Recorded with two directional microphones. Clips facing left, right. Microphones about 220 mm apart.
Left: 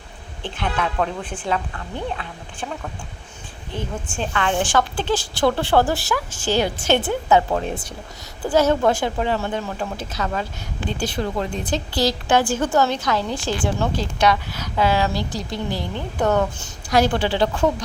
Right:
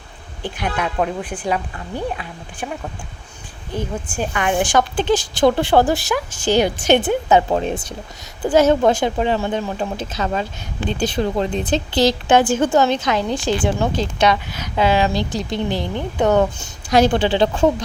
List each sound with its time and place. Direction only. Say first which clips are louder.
0.4 s a woman's voice: right 2 dB; 15° right (ahead or behind)
3.8 s a woman's voice: right 3 dB; 15° right (ahead or behind)